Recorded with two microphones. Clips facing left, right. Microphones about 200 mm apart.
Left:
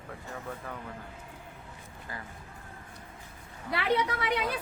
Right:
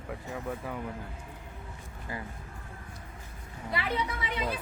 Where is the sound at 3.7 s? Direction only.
70° left (ahead or behind).